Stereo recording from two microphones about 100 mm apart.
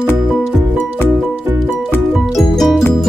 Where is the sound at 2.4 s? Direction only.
Centre (ahead or behind).